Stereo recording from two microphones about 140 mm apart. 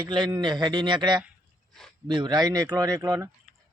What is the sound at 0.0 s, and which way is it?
A man's voice, 30° right (ahead or behind).